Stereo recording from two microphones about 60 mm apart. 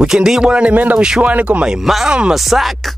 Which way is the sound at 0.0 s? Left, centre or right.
Centre.